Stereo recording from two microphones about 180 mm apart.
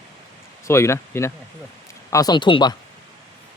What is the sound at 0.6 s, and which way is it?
Speech, 15° left (ahead or behind).